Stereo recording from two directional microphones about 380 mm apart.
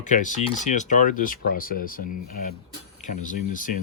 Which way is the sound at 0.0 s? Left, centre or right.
Centre.